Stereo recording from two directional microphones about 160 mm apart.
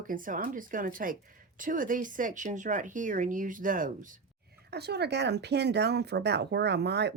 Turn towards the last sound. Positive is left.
turn(degrees=-90)